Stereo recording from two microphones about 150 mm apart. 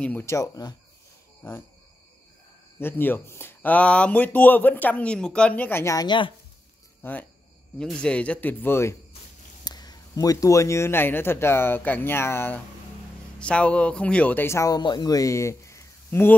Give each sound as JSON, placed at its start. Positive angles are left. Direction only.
{"t": 0.0, "sound": "speech", "side_deg": 15}
{"t": 2.8, "sound": "speech", "side_deg": 15}
{"t": 7.0, "sound": "speech", "side_deg": 10}
{"t": 9.7, "sound": "speech", "side_deg": 25}